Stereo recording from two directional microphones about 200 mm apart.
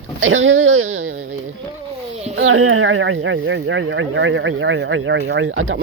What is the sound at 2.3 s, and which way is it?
Speech, 90° right.